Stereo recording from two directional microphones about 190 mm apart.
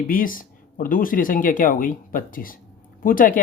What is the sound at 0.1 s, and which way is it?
Speech, 45° left (ahead or behind).